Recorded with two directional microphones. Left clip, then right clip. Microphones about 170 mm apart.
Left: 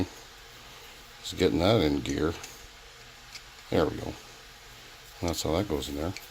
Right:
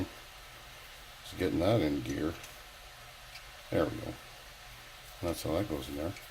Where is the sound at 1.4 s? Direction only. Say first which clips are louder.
Left 5 dB; 70° left (ahead or behind).